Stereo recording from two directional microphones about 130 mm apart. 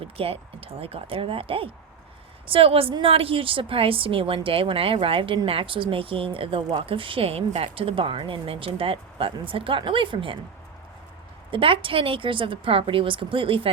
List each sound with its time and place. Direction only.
0.0 s a woman's voice: 45° right (ahead or behind)
11.5 s a woman's voice: 45° right (ahead or behind)